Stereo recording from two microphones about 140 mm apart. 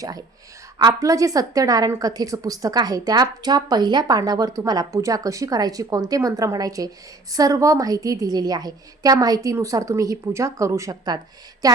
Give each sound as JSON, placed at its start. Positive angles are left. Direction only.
{"t": 0.8, "sound": "a woman's voice", "side_deg": -30}